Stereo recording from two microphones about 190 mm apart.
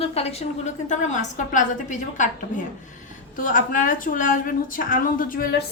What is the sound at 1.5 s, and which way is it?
Speech, 40° left (ahead or behind).